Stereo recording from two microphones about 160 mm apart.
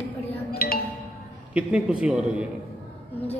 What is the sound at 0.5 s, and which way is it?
Music, 65° left (ahead or behind).